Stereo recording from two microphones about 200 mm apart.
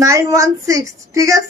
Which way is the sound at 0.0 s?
15° right (ahead or behind).